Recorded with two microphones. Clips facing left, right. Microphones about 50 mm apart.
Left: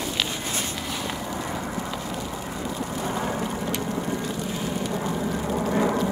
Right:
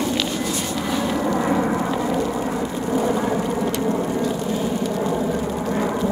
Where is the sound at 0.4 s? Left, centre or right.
Left.